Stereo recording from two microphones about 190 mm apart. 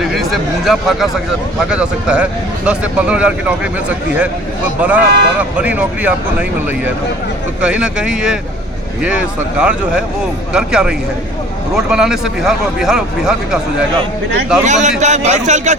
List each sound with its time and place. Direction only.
0.1 s speech: centre (ahead or behind)
7.6 s speech: 5° right (ahead or behind)
14.6 s a man's voice: 40° right (ahead or behind)